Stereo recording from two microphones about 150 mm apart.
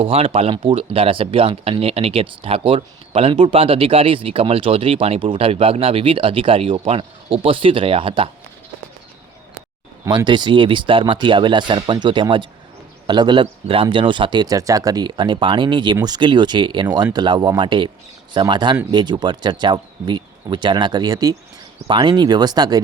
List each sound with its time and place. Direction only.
0.0 s speech: 40° right (ahead or behind)
10.1 s speech: 30° right (ahead or behind)